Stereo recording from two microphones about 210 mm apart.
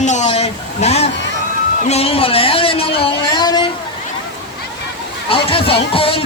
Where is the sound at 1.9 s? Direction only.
30° left (ahead or behind).